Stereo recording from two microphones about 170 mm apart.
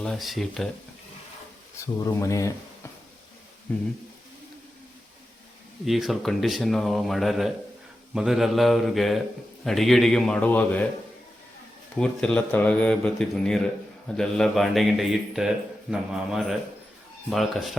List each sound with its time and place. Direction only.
0.0 s a man's voice: centre (ahead or behind)
2.0 s speech: 20° left (ahead or behind)
3.7 s speech: 5° left (ahead or behind)
5.8 s a man's voice: centre (ahead or behind)
11.9 s a man's voice: 5° left (ahead or behind)